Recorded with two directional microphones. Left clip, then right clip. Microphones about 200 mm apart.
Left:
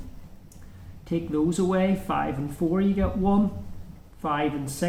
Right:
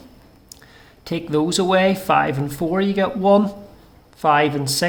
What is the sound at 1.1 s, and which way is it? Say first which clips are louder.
Speech: right 6 dB; 40° right (ahead or behind).